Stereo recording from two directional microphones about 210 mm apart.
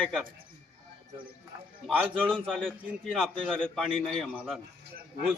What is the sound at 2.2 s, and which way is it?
A man's voice, centre (ahead or behind).